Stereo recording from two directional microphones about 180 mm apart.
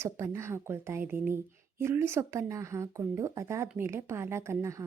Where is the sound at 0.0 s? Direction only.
15° right (ahead or behind).